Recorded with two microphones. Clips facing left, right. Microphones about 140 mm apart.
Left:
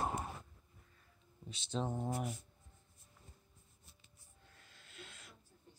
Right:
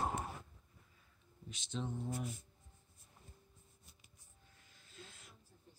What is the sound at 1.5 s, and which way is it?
Speech, 30° left (ahead or behind).